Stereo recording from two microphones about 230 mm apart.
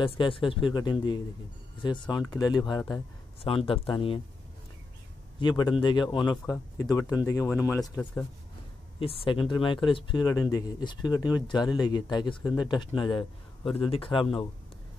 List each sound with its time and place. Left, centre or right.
0.0 s speech: left
5.4 s speech: centre
9.0 s speech: left